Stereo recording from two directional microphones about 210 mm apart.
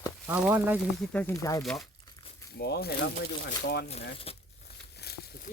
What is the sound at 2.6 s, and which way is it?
Speech, 50° left (ahead or behind).